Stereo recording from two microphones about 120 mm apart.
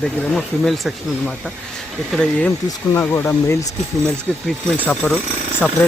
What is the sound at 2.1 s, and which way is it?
Speech, 5° left (ahead or behind).